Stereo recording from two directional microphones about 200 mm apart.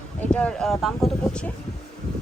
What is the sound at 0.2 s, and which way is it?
Speech, 5° left (ahead or behind).